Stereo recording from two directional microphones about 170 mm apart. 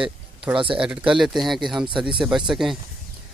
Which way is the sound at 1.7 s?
30° right (ahead or behind).